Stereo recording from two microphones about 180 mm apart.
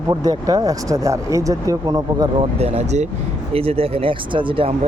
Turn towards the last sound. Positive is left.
turn(degrees=-30)  # may be behind; listen again after turning